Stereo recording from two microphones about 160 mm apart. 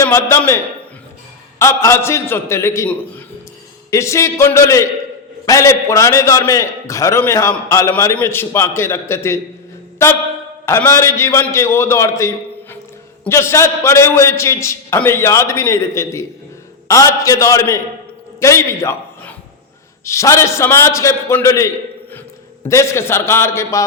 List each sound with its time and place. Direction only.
0.0 s a man's voice: 15° left (ahead or behind)
10.7 s a man's voice: 15° left (ahead or behind)
22.7 s a man's voice: 20° left (ahead or behind)